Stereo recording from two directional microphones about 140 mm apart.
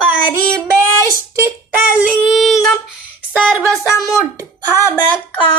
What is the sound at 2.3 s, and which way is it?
Female singing, centre (ahead or behind).